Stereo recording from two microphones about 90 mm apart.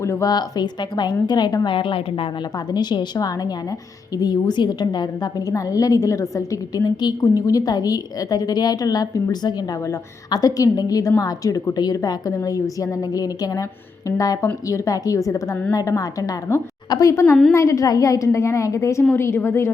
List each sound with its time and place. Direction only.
0.0 s a woman's voice: 30° left (ahead or behind)
0.3 s a woman's voice: 50° left (ahead or behind)
1.7 s a woman's voice: 75° left (ahead or behind)
2.7 s a woman's voice: 55° left (ahead or behind); by 19.7 s 30° left (ahead or behind)